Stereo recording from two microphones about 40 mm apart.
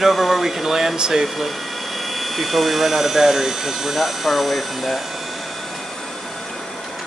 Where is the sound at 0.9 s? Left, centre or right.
Centre.